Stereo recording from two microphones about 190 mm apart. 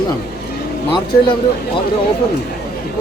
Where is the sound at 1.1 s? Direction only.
50° left (ahead or behind).